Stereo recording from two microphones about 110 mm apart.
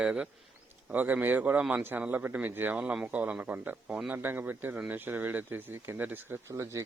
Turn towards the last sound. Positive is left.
turn(degrees=-25)  # may be behind; listen again after turning